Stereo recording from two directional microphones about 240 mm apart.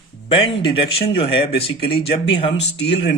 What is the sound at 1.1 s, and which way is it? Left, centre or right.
Speech, left.